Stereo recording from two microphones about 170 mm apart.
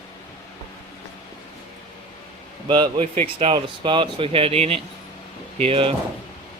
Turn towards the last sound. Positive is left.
turn(degrees=-35)  # may be behind; listen again after turning